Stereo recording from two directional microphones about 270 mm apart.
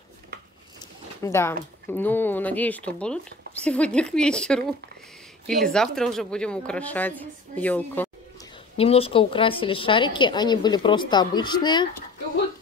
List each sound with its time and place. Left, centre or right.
1.2 s a woman's voice: centre
8.7 s a woman's voice: left